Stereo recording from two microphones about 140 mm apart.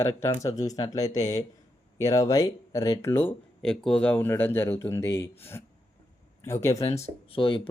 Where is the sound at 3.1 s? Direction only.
15° left (ahead or behind).